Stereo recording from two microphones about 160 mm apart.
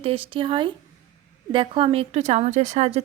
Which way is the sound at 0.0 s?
35° right (ahead or behind).